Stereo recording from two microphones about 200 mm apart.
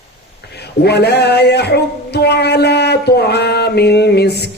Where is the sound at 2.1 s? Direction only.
55° left (ahead or behind).